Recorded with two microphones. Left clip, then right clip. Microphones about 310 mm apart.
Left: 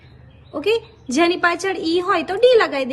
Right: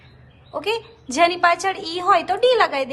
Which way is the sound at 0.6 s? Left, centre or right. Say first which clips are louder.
Left 4 dB; centre.